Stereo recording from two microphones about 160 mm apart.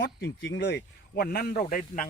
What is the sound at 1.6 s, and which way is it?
Speech, 55° left (ahead or behind).